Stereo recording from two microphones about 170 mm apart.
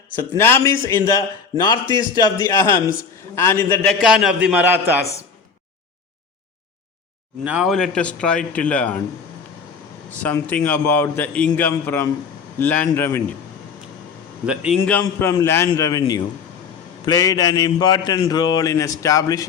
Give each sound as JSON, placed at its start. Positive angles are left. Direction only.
{"t": 0.3, "sound": "a man's voice", "side_deg": 15}
{"t": 4.0, "sound": "a man's voice", "side_deg": -5}
{"t": 7.4, "sound": "speech", "side_deg": -5}
{"t": 10.1, "sound": "a man's voice", "side_deg": 10}
{"t": 14.4, "sound": "a man's voice", "side_deg": -5}
{"t": 14.8, "sound": "a man's voice", "side_deg": 10}
{"t": 15.0, "sound": "a man's voice", "side_deg": 20}